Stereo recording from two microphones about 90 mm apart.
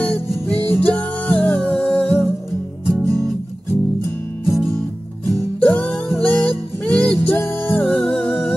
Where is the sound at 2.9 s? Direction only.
40° right (ahead or behind).